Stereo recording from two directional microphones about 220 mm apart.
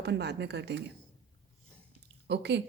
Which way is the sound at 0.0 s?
50° right (ahead or behind).